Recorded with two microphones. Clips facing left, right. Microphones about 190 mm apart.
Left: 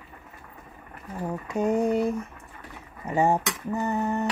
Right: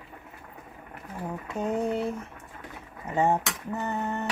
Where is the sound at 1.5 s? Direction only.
10° left (ahead or behind).